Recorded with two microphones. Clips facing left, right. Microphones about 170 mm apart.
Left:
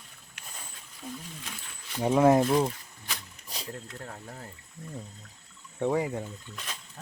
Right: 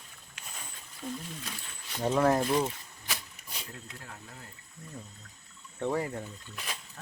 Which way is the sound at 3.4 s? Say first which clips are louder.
Left 5 dB; 35° left (ahead or behind).